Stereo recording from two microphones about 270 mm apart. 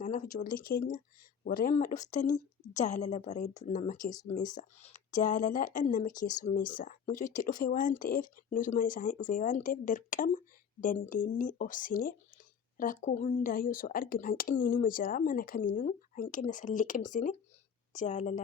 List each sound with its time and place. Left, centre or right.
0.0 s speech: left